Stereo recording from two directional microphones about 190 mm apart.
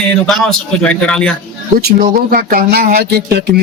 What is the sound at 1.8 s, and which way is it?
Speech, 55° right (ahead or behind).